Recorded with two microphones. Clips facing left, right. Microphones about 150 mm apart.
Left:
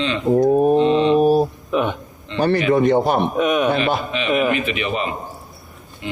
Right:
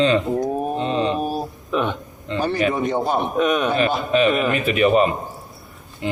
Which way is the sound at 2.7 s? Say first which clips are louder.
Left 5 dB; 70° left (ahead or behind).